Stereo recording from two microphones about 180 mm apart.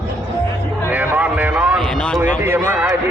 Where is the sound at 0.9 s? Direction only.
10° right (ahead or behind).